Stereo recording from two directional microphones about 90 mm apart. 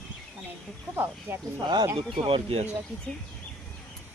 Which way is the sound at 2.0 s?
85° right.